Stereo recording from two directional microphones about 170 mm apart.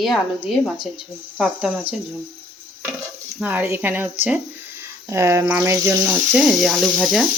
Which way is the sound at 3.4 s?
10° right (ahead or behind).